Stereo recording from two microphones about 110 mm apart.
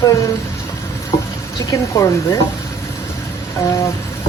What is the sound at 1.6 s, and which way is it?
Speech, 30° left (ahead or behind).